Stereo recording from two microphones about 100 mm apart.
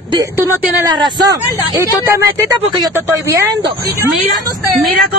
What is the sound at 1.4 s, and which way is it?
A man's voice, 30° right (ahead or behind).